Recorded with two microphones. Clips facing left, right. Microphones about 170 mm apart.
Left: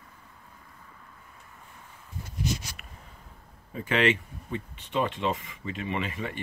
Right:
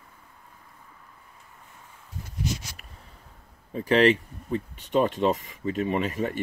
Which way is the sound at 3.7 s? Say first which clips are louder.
Right 5 dB; 35° right (ahead or behind).